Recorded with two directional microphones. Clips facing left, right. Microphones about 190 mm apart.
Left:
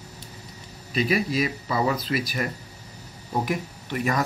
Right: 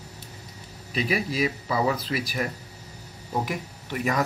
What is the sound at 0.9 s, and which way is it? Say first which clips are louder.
Speech: left 3 dB; 10° right (ahead or behind).